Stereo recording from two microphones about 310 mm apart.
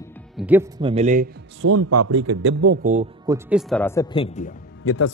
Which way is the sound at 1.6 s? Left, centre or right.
Right.